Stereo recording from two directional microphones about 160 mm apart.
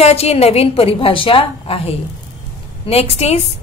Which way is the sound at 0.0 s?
40° left (ahead or behind).